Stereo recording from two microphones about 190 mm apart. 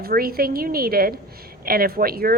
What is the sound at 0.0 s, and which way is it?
A woman's voice, 50° right (ahead or behind).